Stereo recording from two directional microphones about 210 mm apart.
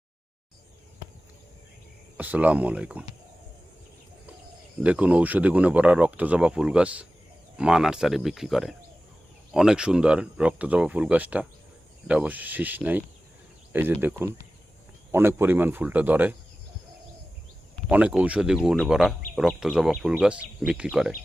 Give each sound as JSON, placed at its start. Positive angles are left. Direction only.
{"t": 2.1, "sound": "speech", "side_deg": -5}
{"t": 4.8, "sound": "speech", "side_deg": -5}
{"t": 14.0, "sound": "speech", "side_deg": -10}
{"t": 17.8, "sound": "speech", "side_deg": -5}